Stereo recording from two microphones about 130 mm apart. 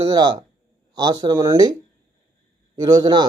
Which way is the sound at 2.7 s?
30° right (ahead or behind).